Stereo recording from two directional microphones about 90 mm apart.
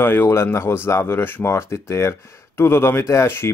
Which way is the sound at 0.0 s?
25° left (ahead or behind).